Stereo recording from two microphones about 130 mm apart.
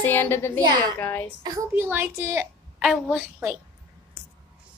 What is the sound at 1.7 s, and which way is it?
Speech, 15° right (ahead or behind).